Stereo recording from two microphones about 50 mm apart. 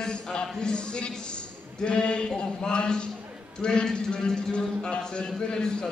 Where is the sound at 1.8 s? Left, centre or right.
Centre.